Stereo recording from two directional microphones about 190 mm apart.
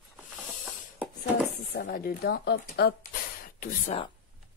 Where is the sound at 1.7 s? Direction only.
50° left (ahead or behind).